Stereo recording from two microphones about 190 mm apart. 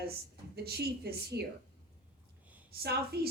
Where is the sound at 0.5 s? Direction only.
60° right (ahead or behind).